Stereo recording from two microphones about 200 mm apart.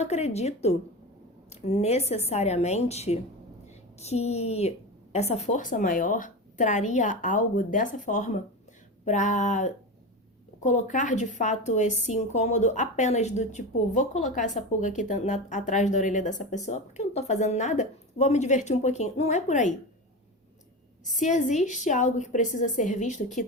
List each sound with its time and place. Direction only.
0.0 s a woman's voice: 35° left (ahead or behind)
21.2 s a woman's voice: 35° left (ahead or behind)